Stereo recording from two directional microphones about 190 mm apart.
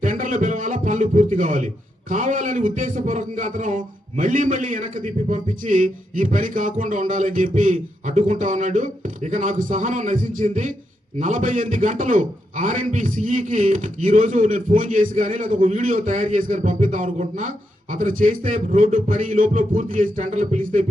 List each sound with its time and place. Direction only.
0.0 s a man's voice: 45° right (ahead or behind)